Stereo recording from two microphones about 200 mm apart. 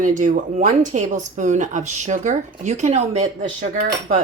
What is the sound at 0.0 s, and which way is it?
A woman's voice, 40° right (ahead or behind).